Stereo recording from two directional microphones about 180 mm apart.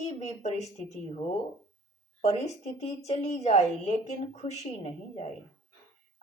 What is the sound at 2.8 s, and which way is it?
Speech, 35° left (ahead or behind).